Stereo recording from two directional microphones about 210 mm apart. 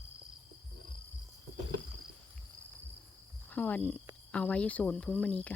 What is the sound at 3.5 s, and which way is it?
Speech, 10° left (ahead or behind).